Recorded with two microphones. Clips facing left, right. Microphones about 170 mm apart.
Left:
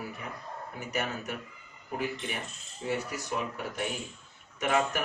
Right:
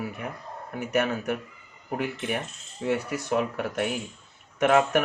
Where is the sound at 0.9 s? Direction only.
60° right (ahead or behind).